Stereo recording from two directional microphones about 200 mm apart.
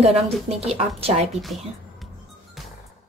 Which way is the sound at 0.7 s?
30° right (ahead or behind).